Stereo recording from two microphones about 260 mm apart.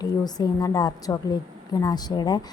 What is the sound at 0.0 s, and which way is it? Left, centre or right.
A woman's voice, centre.